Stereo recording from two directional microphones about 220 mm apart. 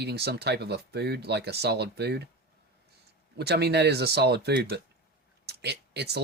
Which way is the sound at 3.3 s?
45° right (ahead or behind).